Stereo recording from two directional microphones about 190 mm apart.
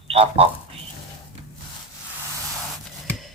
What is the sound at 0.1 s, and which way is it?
Speech, 30° right (ahead or behind).